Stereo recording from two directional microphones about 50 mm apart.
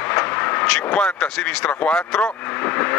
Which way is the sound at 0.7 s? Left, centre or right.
Left.